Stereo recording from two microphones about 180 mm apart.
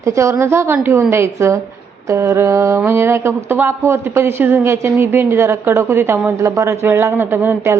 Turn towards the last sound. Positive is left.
turn(degrees=-10)  # may be behind; listen again after turning